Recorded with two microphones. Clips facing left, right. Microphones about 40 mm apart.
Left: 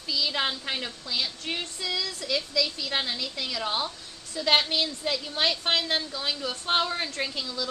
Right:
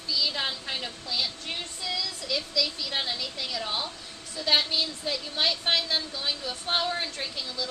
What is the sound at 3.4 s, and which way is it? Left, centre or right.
A woman's voice, left.